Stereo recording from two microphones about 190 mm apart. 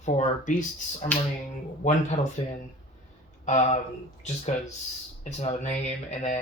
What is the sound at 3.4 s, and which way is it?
Speech, 40° left (ahead or behind).